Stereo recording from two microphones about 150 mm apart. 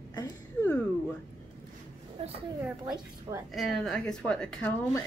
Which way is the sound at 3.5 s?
Centre (ahead or behind).